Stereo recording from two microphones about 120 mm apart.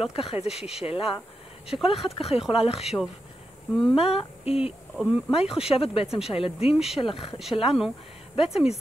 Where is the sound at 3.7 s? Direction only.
5° left (ahead or behind).